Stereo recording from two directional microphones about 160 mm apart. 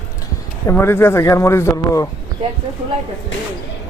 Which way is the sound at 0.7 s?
15° left (ahead or behind).